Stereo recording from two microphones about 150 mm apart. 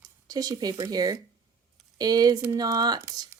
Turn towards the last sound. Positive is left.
turn(degrees=-25)  # may be behind; listen again after turning